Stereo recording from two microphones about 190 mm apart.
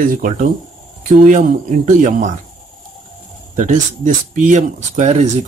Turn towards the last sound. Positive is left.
turn(degrees=-35)  # may be behind; listen again after turning